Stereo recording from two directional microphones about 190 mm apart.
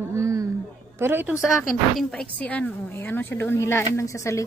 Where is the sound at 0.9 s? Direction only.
10° right (ahead or behind).